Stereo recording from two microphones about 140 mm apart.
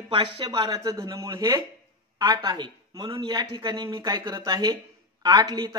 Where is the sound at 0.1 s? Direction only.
35° right (ahead or behind).